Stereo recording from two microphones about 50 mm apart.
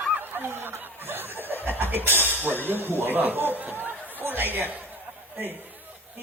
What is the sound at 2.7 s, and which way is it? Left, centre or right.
Speech, right.